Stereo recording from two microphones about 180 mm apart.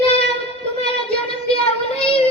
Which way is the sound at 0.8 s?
30° left (ahead or behind).